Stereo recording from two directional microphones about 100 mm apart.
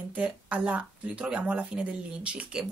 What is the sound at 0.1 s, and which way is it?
Speech, 15° right (ahead or behind).